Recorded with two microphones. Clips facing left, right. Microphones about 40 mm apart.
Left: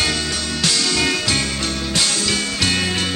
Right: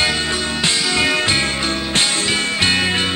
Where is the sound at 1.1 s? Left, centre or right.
Right.